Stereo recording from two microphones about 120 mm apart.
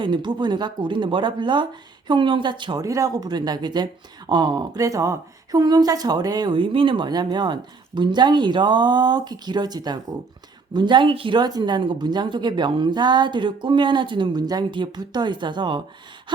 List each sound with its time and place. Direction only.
0.0 s speech: 40° right (ahead or behind)
2.8 s speech: 25° right (ahead or behind)